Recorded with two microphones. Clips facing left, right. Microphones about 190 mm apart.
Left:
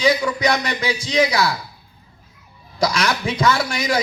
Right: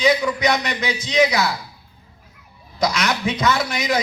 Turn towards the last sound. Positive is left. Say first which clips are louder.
# even
turn(degrees=30)  # may be behind; listen again after turning